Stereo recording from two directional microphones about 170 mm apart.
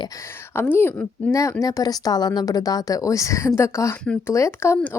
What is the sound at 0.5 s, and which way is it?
Speech, 10° left (ahead or behind).